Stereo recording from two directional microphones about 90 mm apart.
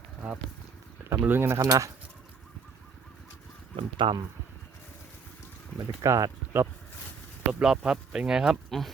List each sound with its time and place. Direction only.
1.2 s speech: 25° right (ahead or behind)
3.8 s speech: 65° right (ahead or behind)
6.0 s speech: 40° right (ahead or behind)
7.6 s speech: 10° right (ahead or behind)